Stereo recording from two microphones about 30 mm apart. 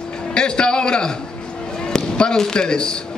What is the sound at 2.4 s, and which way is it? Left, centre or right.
Speech, left.